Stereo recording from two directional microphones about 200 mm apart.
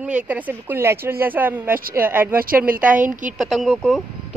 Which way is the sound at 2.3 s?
45° right (ahead or behind).